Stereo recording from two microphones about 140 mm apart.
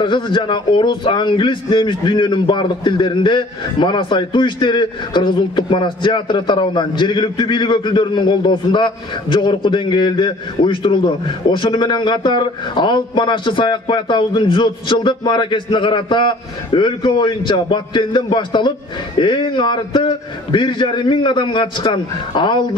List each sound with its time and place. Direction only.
0.0 s a man's voice: 35° left (ahead or behind)